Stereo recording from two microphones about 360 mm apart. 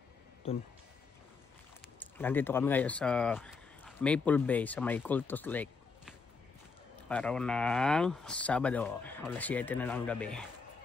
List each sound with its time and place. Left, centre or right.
0.4 s speech: centre
2.0 s speech: centre